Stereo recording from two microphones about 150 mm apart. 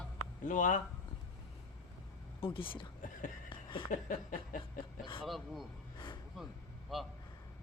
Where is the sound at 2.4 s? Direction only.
35° left (ahead or behind).